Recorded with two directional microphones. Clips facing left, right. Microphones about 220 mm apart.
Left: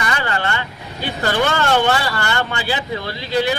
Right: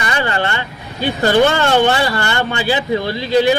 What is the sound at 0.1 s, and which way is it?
Vehicle, 25° right (ahead or behind).